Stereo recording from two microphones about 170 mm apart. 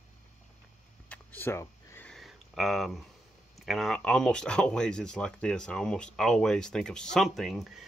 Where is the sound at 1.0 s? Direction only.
10° left (ahead or behind).